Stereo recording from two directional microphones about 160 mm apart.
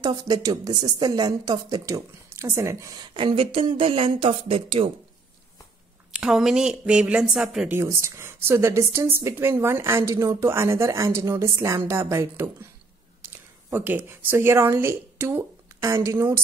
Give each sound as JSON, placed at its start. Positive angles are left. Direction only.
{"t": 0.0, "sound": "a woman's voice", "side_deg": -25}
{"t": 3.2, "sound": "speech", "side_deg": -30}
{"t": 6.1, "sound": "speech", "side_deg": -5}
{"t": 7.7, "sound": "a woman's voice", "side_deg": -15}